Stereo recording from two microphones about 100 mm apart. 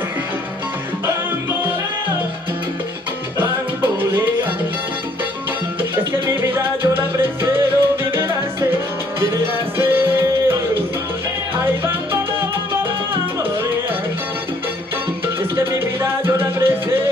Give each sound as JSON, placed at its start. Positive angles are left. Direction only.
{"t": 3.3, "sound": "music", "side_deg": -20}
{"t": 5.8, "sound": "music", "side_deg": -25}
{"t": 11.5, "sound": "salsa music", "side_deg": -25}
{"t": 15.5, "sound": "music", "side_deg": -25}